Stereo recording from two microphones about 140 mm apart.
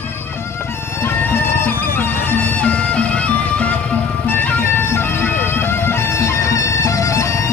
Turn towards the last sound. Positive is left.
turn(degrees=20)  # may be behind; listen again after turning